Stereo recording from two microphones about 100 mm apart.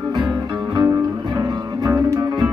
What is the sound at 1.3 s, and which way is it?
Music, 40° right (ahead or behind).